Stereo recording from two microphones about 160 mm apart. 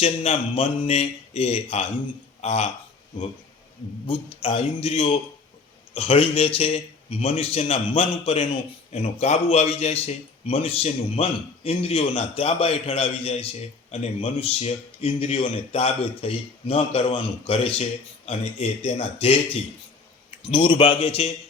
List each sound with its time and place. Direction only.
0.0 s a man's voice: 40° left (ahead or behind)
4.0 s a man's voice: 35° left (ahead or behind)
20.4 s a man's voice: 30° left (ahead or behind)